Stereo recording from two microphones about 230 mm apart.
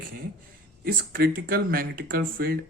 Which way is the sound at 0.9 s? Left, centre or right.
Right.